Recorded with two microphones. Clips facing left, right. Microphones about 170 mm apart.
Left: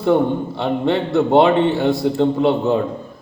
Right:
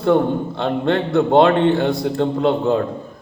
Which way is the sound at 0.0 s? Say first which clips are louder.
Even; 5° left (ahead or behind).